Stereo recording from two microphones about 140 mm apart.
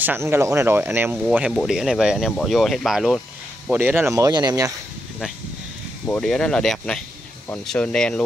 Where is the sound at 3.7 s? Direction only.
15° right (ahead or behind).